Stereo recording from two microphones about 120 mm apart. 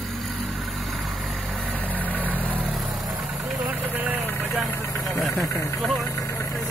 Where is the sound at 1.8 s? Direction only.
15° left (ahead or behind).